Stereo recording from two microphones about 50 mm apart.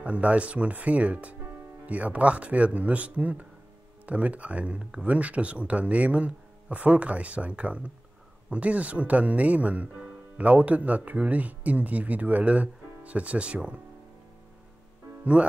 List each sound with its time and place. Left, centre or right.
0.0 s speech: right
15.4 s speech: right